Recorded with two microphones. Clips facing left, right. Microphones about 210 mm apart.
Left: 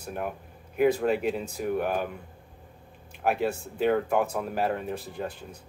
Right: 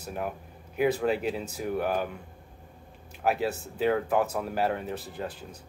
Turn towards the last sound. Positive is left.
turn(degrees=-5)  # may be behind; listen again after turning